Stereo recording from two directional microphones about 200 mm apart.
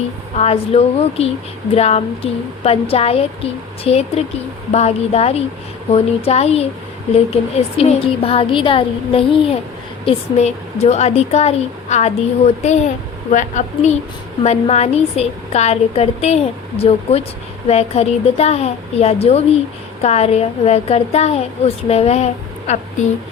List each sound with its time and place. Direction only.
0.3 s a woman's voice: 30° left (ahead or behind)